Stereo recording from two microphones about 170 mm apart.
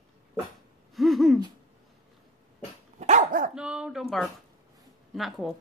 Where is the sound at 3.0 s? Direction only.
45° right (ahead or behind).